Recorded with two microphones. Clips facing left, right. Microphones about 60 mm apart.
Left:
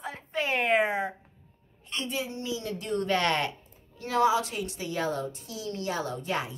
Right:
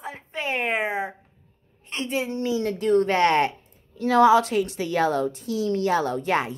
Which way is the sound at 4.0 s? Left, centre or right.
Right.